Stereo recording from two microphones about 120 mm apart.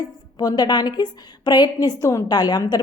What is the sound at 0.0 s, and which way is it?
A woman's voice, 35° left (ahead or behind).